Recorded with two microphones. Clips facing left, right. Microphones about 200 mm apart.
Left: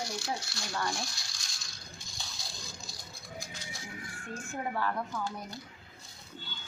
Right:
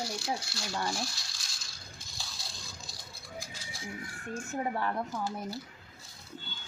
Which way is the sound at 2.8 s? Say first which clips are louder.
Left 1 dB; centre (ahead or behind).